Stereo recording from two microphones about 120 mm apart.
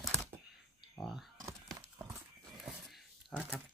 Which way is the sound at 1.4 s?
30° right (ahead or behind).